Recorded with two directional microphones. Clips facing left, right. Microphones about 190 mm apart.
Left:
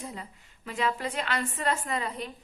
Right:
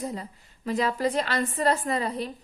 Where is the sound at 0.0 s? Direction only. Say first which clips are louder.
Right 7 dB; 40° right (ahead or behind).